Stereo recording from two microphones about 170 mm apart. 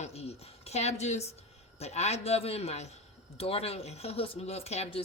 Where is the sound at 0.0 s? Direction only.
35° left (ahead or behind).